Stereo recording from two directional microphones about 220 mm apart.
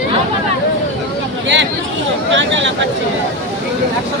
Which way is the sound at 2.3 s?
55° right (ahead or behind).